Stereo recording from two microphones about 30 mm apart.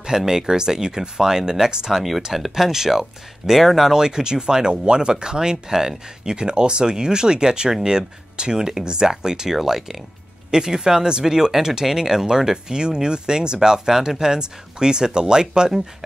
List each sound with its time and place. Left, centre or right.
0.2 s speech: centre
0.5 s speech: right
3.9 s speech: right
6.3 s speech: right